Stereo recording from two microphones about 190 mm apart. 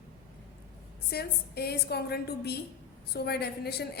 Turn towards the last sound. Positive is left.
turn(degrees=60)  # may be behind; listen again after turning